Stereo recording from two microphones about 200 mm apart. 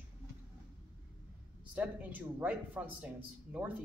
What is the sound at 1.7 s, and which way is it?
A man's voice, 10° right (ahead or behind).